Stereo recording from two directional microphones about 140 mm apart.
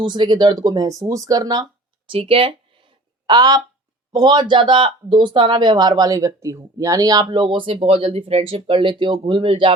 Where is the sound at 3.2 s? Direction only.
30° right (ahead or behind).